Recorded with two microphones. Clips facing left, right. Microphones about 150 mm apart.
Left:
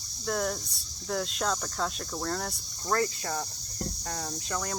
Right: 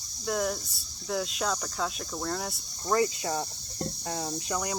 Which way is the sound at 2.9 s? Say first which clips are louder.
Right 3 dB; 15° right (ahead or behind).